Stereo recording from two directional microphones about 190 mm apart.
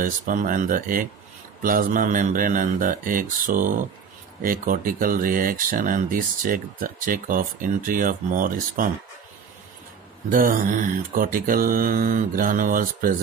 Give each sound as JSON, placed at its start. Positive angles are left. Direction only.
{"t": 0.0, "sound": "speech", "side_deg": -45}
{"t": 10.3, "sound": "speech", "side_deg": -45}